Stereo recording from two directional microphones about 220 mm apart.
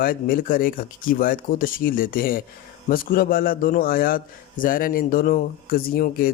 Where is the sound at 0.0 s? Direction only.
40° left (ahead or behind).